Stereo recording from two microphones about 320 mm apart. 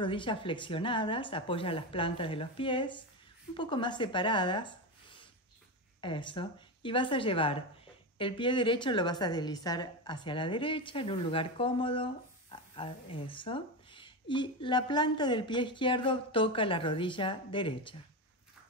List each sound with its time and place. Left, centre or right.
0.0 s a woman's voice: centre